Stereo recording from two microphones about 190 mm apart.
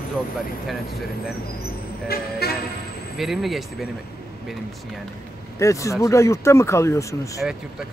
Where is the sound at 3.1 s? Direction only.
Centre (ahead or behind).